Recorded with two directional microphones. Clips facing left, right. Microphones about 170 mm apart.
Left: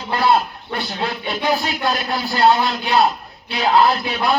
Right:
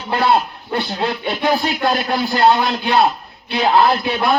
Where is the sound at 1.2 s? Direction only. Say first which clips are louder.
Right 2 dB; 40° right (ahead or behind).